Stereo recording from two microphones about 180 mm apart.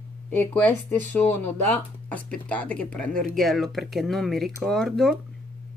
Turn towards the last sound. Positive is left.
turn(degrees=0)  # may be behind; listen again after turning